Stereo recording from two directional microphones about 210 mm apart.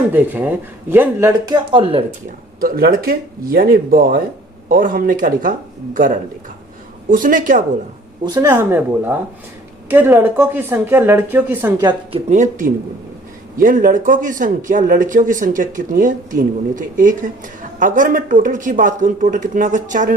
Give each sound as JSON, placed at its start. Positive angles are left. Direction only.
{"t": 0.1, "sound": "speech", "side_deg": -10}
{"t": 2.6, "sound": "speech", "side_deg": -45}
{"t": 8.2, "sound": "speech", "side_deg": -15}
{"t": 12.3, "sound": "speech", "side_deg": -40}